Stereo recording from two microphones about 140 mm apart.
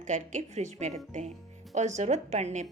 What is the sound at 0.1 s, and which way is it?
A woman's voice, 60° right (ahead or behind).